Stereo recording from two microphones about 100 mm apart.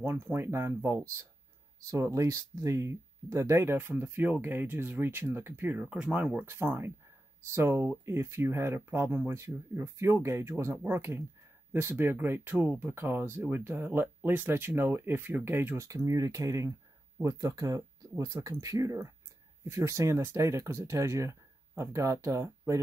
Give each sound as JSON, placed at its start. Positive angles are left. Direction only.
{"t": 0.0, "sound": "speech", "side_deg": -25}
{"t": 6.5, "sound": "speech", "side_deg": -25}